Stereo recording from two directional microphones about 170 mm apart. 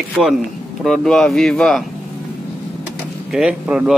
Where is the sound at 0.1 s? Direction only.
Centre (ahead or behind).